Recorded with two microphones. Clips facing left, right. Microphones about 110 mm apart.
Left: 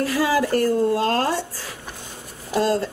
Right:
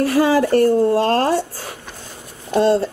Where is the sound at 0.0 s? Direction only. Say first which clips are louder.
Right 6 dB; 55° right (ahead or behind).